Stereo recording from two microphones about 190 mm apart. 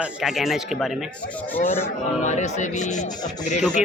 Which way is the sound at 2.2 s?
40° left (ahead or behind).